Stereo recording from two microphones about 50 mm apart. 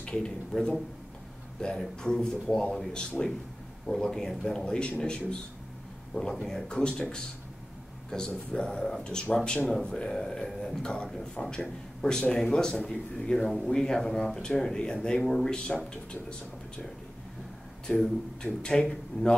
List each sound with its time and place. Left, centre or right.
0.0 s speech: centre
6.4 s speech: centre
10.1 s speech: centre
10.8 s speech: centre
11.1 s speech: centre
17.8 s speech: centre